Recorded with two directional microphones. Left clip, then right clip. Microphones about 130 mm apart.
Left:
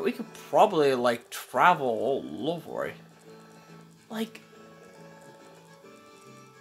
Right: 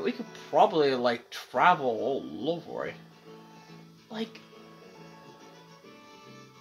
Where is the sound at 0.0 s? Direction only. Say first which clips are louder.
Left 2 dB; 50° left (ahead or behind).